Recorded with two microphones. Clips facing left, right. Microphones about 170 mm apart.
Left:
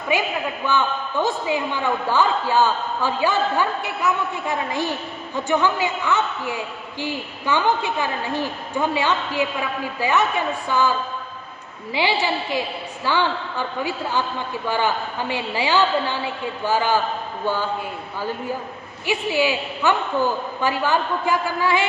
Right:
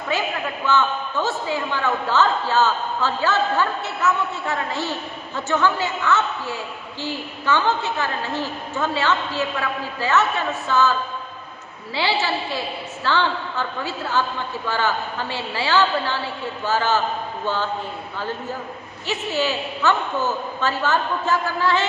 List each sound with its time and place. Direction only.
0.1 s a man's voice: 15° left (ahead or behind)
11.9 s a man's voice: 15° left (ahead or behind)